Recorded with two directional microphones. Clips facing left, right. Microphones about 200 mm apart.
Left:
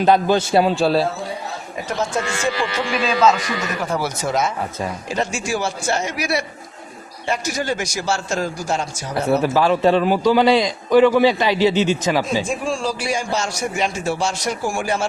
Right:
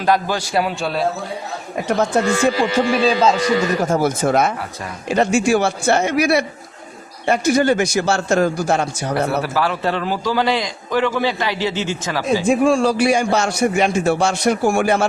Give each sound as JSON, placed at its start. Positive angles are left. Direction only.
{"t": 0.0, "sound": "a man's voice", "side_deg": 20}
{"t": 1.9, "sound": "a man's voice", "side_deg": -60}
{"t": 2.9, "sound": "speech", "side_deg": -35}
{"t": 3.8, "sound": "a man's voice", "side_deg": -45}
{"t": 9.4, "sound": "a man's voice", "side_deg": 20}
{"t": 12.5, "sound": "a man's voice", "side_deg": -60}